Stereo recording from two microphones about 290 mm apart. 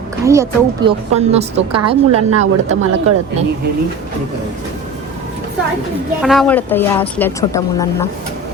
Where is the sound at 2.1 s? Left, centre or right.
Right.